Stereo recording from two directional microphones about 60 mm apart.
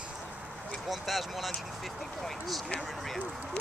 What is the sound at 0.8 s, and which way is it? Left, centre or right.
Speech, centre.